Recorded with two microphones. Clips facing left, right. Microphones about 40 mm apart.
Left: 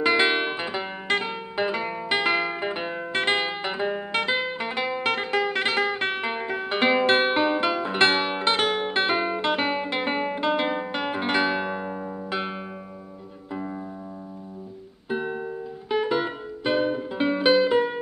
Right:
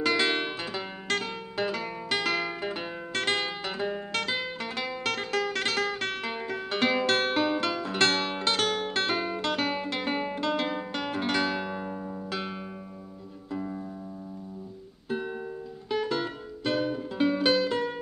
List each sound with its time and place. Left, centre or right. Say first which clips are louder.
0.0 s music: left 5 dB; left
15.0 s music: left 4 dB; left